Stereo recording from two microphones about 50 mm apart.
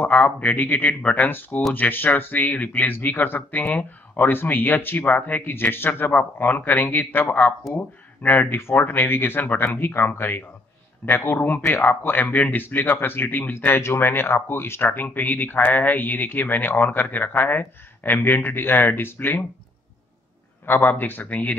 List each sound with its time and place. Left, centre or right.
0.0 s speech: left
5.5 s speech: left
8.5 s speech: left
15.1 s speech: left
20.6 s speech: left